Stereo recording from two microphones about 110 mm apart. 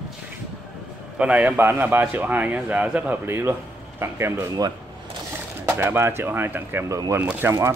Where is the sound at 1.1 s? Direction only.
10° right (ahead or behind).